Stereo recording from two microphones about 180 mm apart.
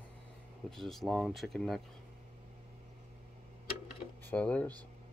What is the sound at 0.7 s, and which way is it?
Speech, centre (ahead or behind).